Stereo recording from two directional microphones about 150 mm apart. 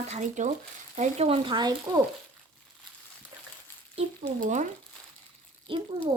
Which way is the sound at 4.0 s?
40° right (ahead or behind).